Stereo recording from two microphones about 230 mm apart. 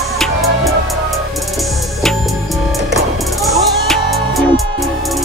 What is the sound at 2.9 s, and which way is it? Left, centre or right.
Music, centre.